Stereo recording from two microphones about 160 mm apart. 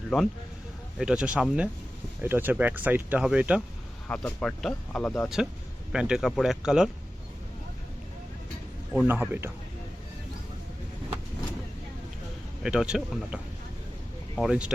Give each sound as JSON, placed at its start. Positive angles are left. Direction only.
{"t": 0.1, "sound": "speech", "side_deg": 0}
{"t": 4.1, "sound": "speech", "side_deg": 5}
{"t": 8.9, "sound": "speech", "side_deg": -10}
{"t": 12.6, "sound": "speech", "side_deg": -5}